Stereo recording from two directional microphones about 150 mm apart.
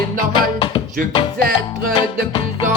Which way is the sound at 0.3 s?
30° left (ahead or behind).